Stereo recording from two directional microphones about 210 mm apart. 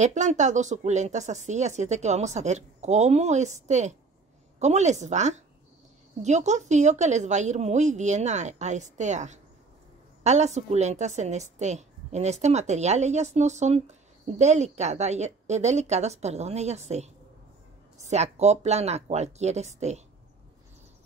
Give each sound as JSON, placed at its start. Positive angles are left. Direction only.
{"t": 0.0, "sound": "a woman's voice", "side_deg": -35}